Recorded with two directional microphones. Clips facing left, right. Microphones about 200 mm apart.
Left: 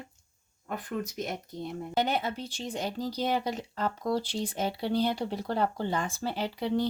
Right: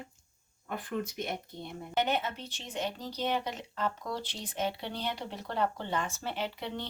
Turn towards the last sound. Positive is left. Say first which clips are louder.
# left 7 dB
turn(degrees=35)  # may be behind; listen again after turning